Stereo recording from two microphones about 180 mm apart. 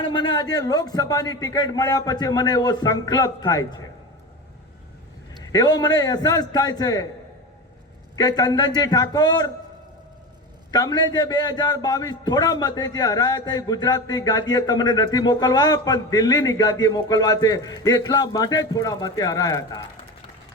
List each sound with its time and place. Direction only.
0.0 s a man's voice: 25° left (ahead or behind)
5.4 s a man's voice: 20° left (ahead or behind)
8.1 s a man's voice: 20° left (ahead or behind)
10.7 s a man's voice: 20° left (ahead or behind)